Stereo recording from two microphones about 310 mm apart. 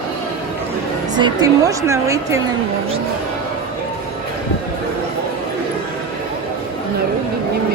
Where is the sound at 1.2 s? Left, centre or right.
Centre.